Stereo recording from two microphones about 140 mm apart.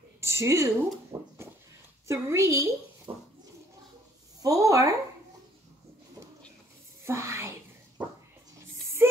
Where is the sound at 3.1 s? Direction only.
40° right (ahead or behind).